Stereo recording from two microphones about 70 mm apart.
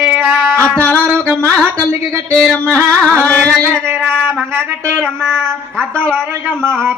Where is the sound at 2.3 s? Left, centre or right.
Left.